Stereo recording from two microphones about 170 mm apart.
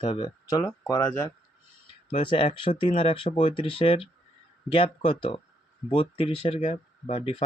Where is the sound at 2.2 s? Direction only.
30° left (ahead or behind).